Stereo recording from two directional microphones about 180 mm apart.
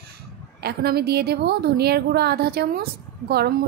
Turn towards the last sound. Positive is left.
turn(degrees=-60)  # may be behind; listen again after turning